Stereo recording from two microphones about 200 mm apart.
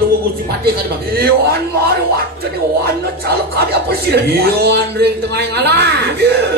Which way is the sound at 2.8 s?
50° right (ahead or behind).